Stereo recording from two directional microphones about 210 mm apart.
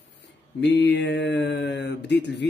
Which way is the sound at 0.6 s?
55° left (ahead or behind).